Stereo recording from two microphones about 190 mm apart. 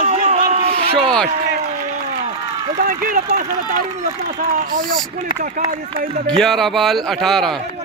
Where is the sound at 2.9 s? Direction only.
45° right (ahead or behind).